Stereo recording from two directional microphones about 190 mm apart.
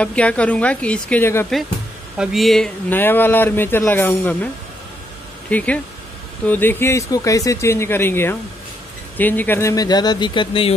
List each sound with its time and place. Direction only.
0.0 s a man's voice: 5° left (ahead or behind)
2.1 s a man's voice: centre (ahead or behind)
5.5 s a man's voice: 5° left (ahead or behind); by 10.7 s 25° left (ahead or behind)